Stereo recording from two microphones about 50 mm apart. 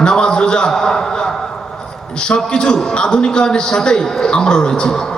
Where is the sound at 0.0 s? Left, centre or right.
Centre.